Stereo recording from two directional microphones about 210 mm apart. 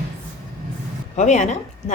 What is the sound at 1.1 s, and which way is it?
Speech, 35° left (ahead or behind).